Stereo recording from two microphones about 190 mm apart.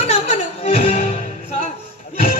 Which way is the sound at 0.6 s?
30° left (ahead or behind).